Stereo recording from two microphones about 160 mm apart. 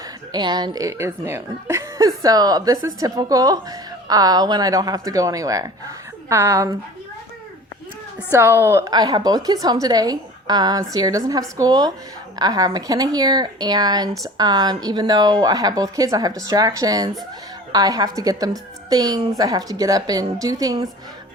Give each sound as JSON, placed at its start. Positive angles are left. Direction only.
{"t": 0.3, "sound": "speech", "side_deg": -25}
{"t": 8.3, "sound": "speech", "side_deg": -15}